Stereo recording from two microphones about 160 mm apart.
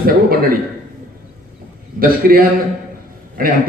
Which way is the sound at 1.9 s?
65° right (ahead or behind).